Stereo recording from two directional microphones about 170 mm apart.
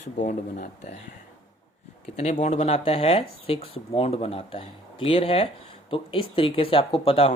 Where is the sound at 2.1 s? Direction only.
45° left (ahead or behind).